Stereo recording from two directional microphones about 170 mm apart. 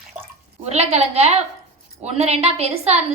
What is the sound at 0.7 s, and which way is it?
A woman's voice, 40° right (ahead or behind).